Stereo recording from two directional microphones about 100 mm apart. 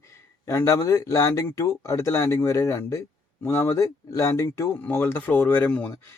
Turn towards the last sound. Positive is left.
turn(degrees=15)  # may be behind; listen again after turning